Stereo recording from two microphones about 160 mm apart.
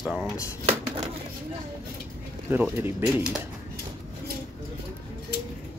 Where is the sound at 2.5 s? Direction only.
15° right (ahead or behind).